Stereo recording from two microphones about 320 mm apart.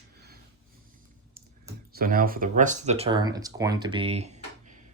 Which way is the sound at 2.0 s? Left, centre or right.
Right.